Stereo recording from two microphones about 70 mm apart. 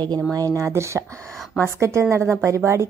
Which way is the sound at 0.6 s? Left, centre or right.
Right.